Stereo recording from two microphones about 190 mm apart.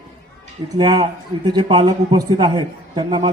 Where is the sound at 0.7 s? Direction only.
20° right (ahead or behind).